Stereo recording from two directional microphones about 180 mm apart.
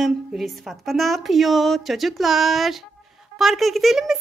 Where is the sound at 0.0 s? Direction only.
Centre (ahead or behind).